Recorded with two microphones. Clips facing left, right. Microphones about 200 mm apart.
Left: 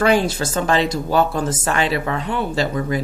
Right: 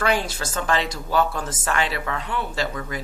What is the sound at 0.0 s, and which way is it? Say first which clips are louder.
Speech: left 7 dB; 25° left (ahead or behind).